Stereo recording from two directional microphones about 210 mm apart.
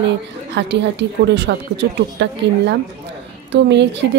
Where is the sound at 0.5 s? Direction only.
55° right (ahead or behind).